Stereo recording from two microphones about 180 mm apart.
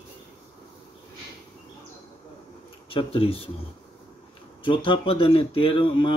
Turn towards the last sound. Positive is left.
turn(degrees=30)  # may be behind; listen again after turning